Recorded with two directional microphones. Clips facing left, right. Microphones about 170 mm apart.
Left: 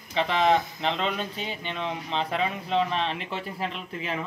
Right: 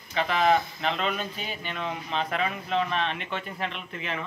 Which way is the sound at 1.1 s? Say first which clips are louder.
Left 2 dB; 25° left (ahead or behind).